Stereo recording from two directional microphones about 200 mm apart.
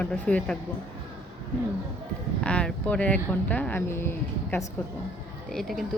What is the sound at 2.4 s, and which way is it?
Speech, 5° left (ahead or behind).